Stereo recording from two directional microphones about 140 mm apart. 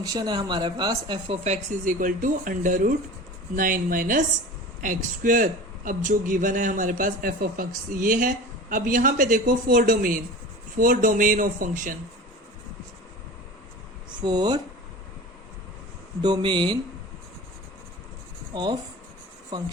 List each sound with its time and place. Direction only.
0.0 s speech: 25° right (ahead or behind)
1.5 s a man's voice: 65° right (ahead or behind); by 7.7 s 90° right
8.0 s a man's voice: 75° right (ahead or behind)
14.2 s speech: 30° right (ahead or behind)
16.2 s speech: 35° right (ahead or behind)
18.5 s speech: 30° right (ahead or behind)